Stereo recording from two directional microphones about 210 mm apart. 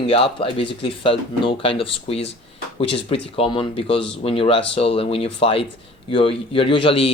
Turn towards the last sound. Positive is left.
turn(degrees=25)  # may be behind; listen again after turning